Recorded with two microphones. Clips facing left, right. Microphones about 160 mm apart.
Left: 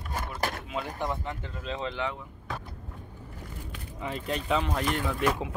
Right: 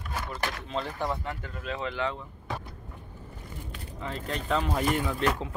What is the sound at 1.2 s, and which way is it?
Speech, 25° left (ahead or behind).